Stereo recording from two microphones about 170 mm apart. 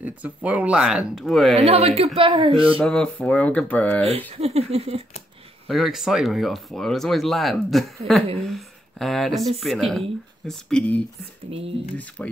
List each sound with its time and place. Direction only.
0.0 s speech: 10° right (ahead or behind)
1.6 s speech: 35° right (ahead or behind)
2.8 s speech: 5° left (ahead or behind)
4.3 s speech: 35° right (ahead or behind)
5.7 s speech: centre (ahead or behind)
11.5 s speech: 35° right (ahead or behind)
12.2 s speech: 10° left (ahead or behind)